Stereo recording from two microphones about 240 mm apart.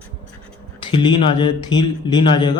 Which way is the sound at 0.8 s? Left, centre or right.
Centre.